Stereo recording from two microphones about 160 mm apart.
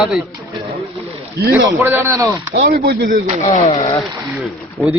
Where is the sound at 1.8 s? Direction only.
15° right (ahead or behind).